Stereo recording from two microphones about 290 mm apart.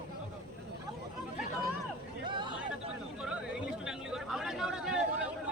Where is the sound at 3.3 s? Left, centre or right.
Centre.